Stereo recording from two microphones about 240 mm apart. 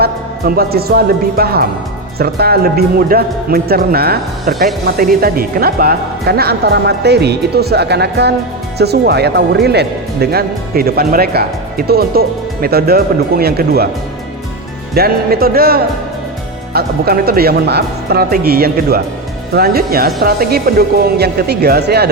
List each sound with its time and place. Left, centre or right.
0.0 s speech: right
14.9 s speech: right